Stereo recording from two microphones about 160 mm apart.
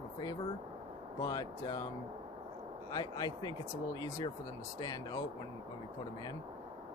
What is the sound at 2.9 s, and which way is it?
Speech, 25° left (ahead or behind).